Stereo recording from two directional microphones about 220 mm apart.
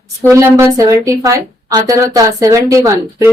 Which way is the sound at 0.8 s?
15° right (ahead or behind).